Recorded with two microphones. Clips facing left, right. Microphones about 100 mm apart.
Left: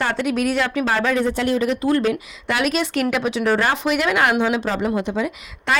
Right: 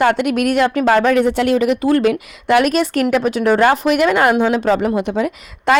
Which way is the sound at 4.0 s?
5° right (ahead or behind).